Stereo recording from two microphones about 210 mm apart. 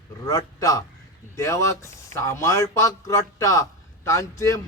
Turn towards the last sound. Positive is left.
turn(degrees=15)  # may be behind; listen again after turning